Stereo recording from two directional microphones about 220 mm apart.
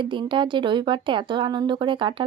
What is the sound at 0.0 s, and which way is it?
Speech, 20° right (ahead or behind).